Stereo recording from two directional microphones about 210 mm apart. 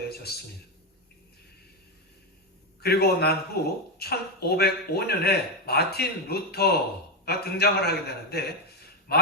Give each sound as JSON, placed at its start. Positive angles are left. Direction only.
{"t": 0.1, "sound": "a man's voice", "side_deg": 50}
{"t": 2.8, "sound": "speech", "side_deg": 50}